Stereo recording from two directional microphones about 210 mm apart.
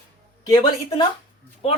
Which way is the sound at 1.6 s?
30° left (ahead or behind).